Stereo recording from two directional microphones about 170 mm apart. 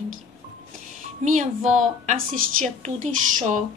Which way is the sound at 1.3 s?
45° right (ahead or behind).